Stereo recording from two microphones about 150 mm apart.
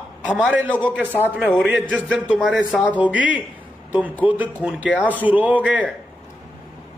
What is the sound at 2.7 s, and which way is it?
Speech, 10° left (ahead or behind).